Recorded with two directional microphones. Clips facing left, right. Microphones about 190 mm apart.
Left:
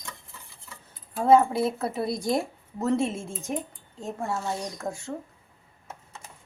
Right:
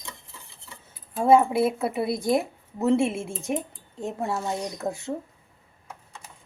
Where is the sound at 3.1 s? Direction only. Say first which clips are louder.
Right 3 dB; 65° right (ahead or behind).